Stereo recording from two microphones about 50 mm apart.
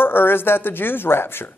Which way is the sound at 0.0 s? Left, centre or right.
Left.